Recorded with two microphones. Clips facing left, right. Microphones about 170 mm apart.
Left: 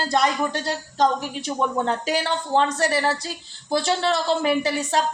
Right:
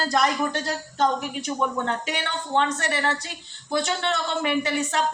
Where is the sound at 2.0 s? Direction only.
35° left (ahead or behind).